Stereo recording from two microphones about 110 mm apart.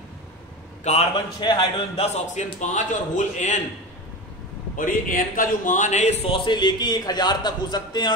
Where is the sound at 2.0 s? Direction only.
90° left.